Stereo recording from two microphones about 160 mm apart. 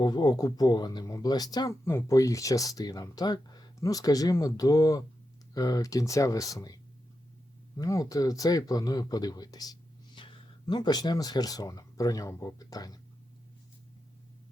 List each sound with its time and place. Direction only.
0.0 s speech: 25° left (ahead or behind)
7.8 s speech: 20° left (ahead or behind)